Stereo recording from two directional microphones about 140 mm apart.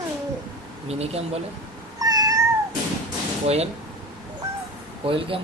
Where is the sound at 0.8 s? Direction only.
45° right (ahead or behind).